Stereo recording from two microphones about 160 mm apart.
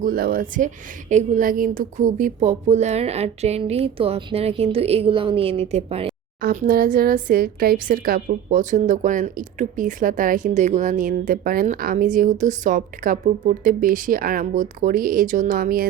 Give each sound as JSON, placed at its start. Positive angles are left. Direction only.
{"t": 0.0, "sound": "a woman's voice", "side_deg": -65}
{"t": 6.4, "sound": "a woman's voice", "side_deg": -60}